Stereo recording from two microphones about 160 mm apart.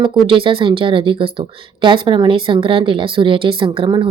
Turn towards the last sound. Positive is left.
turn(degrees=-35)  # may be behind; listen again after turning